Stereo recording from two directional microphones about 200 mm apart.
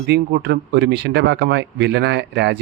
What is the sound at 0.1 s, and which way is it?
Speech, 55° right (ahead or behind).